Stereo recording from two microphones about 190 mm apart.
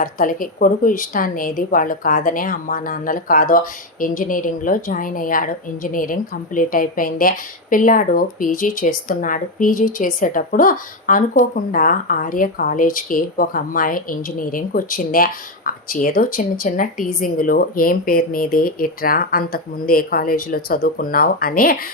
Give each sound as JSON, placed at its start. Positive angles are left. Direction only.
{"t": 0.0, "sound": "speech", "side_deg": 45}